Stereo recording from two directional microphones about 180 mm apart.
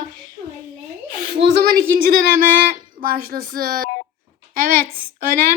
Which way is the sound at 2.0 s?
50° right (ahead or behind).